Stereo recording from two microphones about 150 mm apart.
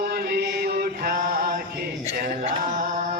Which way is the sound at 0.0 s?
90° right.